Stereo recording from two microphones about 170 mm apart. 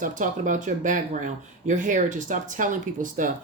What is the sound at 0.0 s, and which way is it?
Speech, 50° right (ahead or behind).